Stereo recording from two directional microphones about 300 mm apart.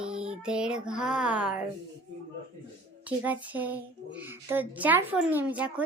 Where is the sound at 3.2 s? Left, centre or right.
Centre.